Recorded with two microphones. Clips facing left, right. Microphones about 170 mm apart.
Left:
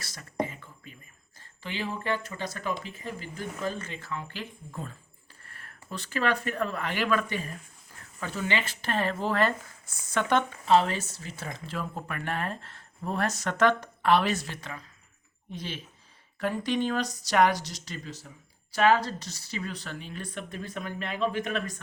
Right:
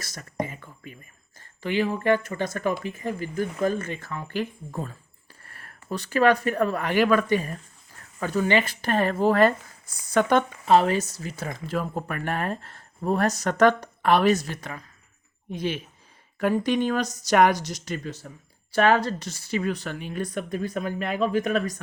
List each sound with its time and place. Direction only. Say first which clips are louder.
0.0 s speech: right 5 dB; 45° right (ahead or behind)
1.4 s speech: right 10 dB; 50° right (ahead or behind)
20.2 s speech: right 8 dB; 40° right (ahead or behind)